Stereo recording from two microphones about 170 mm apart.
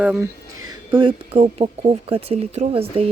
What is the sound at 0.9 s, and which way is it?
Speech, 30° right (ahead or behind).